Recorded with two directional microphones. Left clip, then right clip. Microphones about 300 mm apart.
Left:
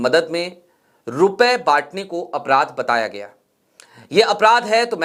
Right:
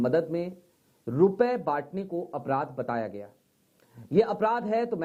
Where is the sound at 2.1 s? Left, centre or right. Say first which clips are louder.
Left 8 dB; left.